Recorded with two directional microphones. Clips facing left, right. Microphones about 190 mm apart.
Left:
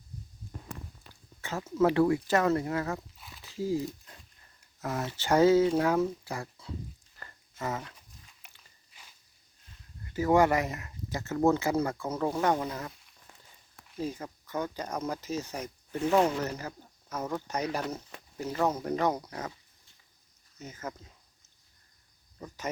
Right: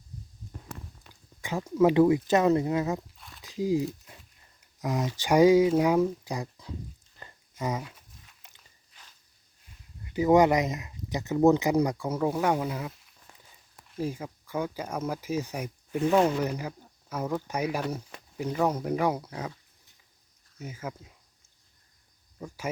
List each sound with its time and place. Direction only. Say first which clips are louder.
1.4 s speech: right 3 dB; 15° right (ahead or behind)
3.2 s a sound: even; 5° left (ahead or behind)
3.4 s a sound: right 4 dB; 15° right (ahead or behind)
4.8 s speech: right 4 dB; 15° right (ahead or behind)
7.2 s dog: right 3 dB; 15° right (ahead or behind)
8.9 s walk: even; 10° left (ahead or behind)
10.0 s speech: right 3 dB; 15° right (ahead or behind)
20.6 s speech: right 2 dB; 10° right (ahead or behind)
22.4 s speech: right 2 dB; 10° right (ahead or behind)